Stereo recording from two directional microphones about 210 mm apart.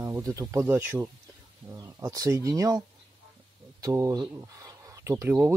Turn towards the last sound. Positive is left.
turn(degrees=-10)  # may be behind; listen again after turning